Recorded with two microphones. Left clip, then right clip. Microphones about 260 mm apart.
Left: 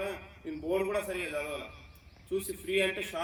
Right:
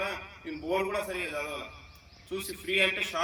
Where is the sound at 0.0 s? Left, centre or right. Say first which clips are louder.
Right 3 dB; centre.